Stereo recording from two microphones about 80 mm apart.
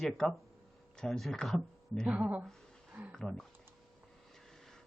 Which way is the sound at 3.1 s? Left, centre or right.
Centre.